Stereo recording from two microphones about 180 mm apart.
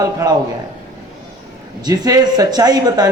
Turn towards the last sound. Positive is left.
turn(degrees=-20)  # may be behind; listen again after turning